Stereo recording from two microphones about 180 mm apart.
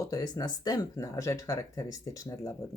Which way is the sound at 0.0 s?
20° left (ahead or behind).